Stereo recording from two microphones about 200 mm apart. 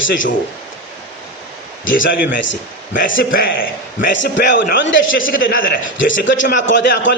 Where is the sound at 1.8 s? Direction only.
45° left (ahead or behind).